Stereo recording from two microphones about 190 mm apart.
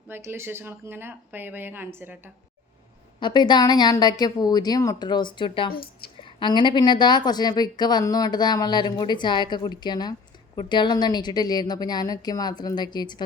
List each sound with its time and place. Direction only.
0.1 s speech: 10° right (ahead or behind)
3.2 s a woman's voice: 25° left (ahead or behind)
5.7 s a woman's voice: 50° left (ahead or behind)
6.2 s a woman's voice: 25° left (ahead or behind)